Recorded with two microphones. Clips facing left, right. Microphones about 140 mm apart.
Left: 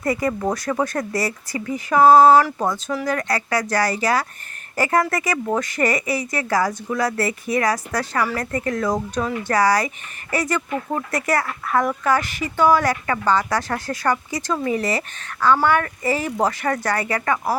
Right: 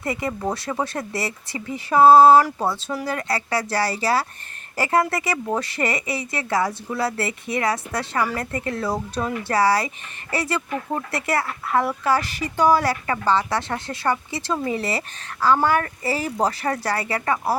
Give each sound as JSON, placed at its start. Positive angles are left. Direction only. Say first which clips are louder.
{"t": 0.1, "sound": "speech", "louder": "left 4 dB", "side_deg": -25}